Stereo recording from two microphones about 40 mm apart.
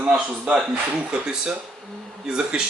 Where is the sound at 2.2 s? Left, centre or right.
Right.